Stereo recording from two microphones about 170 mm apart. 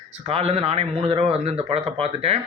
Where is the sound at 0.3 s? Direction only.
35° right (ahead or behind).